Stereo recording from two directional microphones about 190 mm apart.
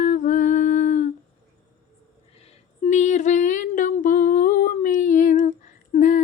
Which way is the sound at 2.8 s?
40° left (ahead or behind).